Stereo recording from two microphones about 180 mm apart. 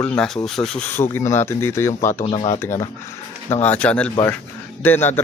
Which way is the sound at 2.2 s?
30° left (ahead or behind).